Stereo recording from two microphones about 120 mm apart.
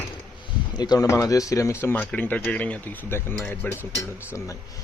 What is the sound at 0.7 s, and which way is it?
Speech, 35° left (ahead or behind).